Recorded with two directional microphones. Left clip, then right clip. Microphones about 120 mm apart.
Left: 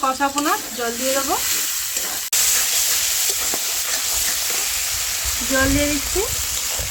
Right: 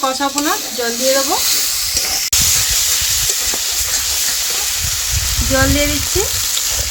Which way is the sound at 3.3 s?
5° left (ahead or behind).